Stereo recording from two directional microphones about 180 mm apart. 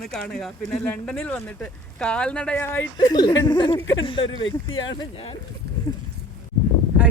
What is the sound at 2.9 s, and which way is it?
Speech, 25° left (ahead or behind).